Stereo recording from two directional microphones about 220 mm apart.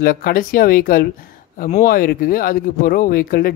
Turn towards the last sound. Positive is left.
turn(degrees=40)  # may be behind; listen again after turning